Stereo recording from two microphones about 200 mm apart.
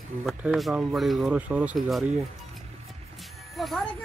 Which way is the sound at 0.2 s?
5° right (ahead or behind).